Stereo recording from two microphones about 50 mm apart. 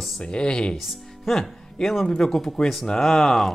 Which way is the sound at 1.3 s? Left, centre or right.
Centre.